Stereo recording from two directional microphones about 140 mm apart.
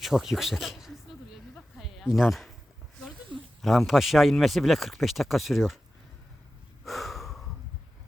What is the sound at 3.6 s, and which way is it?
Speech, centre (ahead or behind).